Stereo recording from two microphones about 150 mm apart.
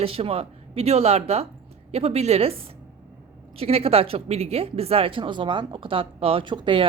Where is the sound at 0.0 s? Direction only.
40° right (ahead or behind).